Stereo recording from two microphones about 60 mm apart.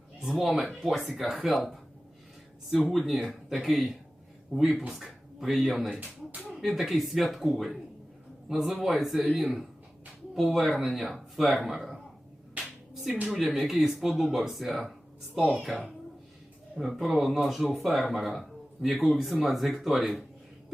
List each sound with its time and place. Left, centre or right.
0.2 s a man's voice: centre
13.3 s speech: centre
15.4 s speech: left
16.7 s speech: centre